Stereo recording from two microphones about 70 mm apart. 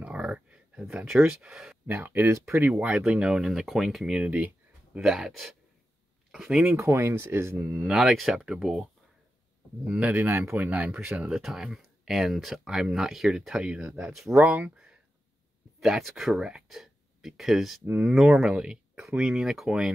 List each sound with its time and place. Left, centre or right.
0.0 s a sound: centre
1.4 s speech: centre
1.9 s speech: right
3.0 s speech: centre
6.8 s speech: right
7.8 s speech: centre
9.9 s speech: right
10.3 s speech: right
10.7 s speech: centre
14.3 s speech: right
14.6 s speech: centre